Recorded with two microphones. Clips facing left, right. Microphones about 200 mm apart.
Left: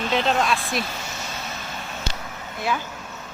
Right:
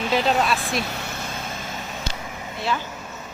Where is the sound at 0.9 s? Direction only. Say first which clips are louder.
Right 2 dB; 60° right (ahead or behind).